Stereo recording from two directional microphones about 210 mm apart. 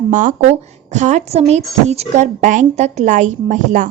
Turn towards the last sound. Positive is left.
turn(degrees=-35)  # may be behind; listen again after turning